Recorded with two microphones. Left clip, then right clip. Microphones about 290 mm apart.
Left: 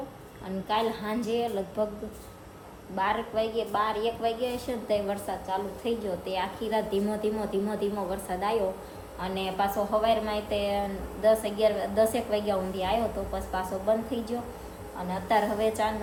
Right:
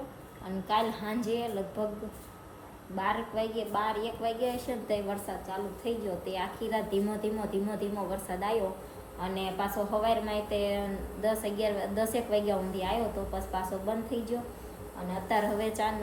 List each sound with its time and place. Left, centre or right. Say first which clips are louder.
0.4 s a woman's voice: left 1 dB; centre
2.9 s a woman's voice: left 4 dB; centre